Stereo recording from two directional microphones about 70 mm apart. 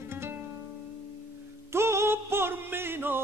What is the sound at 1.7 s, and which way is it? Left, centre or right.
Music, right.